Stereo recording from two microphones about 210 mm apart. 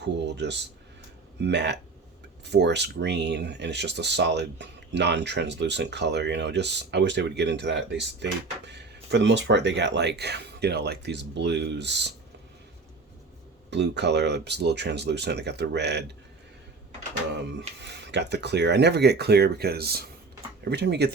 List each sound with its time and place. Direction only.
0.0 s speech: 55° right (ahead or behind)
13.7 s speech: 55° right (ahead or behind)
17.3 s speech: 55° right (ahead or behind)